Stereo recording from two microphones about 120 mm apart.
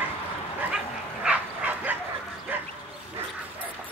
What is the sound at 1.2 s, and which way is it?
Bow-wow, 10° right (ahead or behind).